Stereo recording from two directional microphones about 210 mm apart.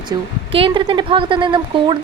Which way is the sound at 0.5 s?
25° right (ahead or behind).